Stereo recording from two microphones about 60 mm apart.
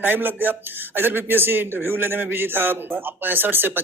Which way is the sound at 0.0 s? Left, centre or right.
Right.